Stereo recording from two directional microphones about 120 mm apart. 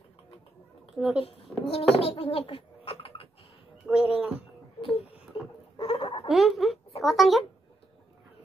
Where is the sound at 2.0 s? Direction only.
50° left (ahead or behind).